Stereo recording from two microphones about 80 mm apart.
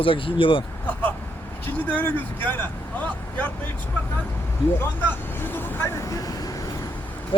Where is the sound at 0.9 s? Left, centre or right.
Left.